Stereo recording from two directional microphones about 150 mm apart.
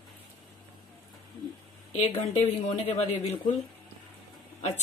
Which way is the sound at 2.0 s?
50° left (ahead or behind).